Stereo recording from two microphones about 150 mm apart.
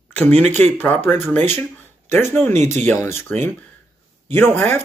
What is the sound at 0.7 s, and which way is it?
Speech, 15° left (ahead or behind).